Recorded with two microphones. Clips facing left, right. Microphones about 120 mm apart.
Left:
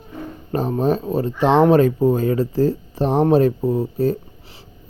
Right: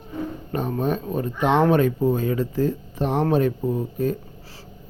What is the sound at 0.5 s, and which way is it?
Speech, 35° left (ahead or behind).